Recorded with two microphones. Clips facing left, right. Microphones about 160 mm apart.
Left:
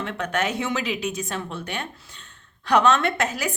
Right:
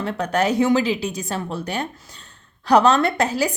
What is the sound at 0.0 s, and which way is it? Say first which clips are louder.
A woman's voice: right 5 dB; 35° right (ahead or behind).